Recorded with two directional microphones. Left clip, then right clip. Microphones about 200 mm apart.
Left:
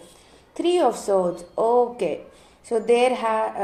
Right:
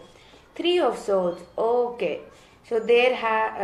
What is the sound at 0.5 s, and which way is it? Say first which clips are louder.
A woman's voice: left 2 dB; 50° left (ahead or behind).